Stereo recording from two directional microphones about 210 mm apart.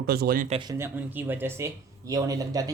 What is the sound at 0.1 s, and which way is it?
Speech, 45° right (ahead or behind).